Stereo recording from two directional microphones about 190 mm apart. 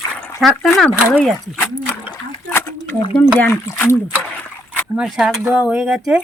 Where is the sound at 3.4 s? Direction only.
10° left (ahead or behind).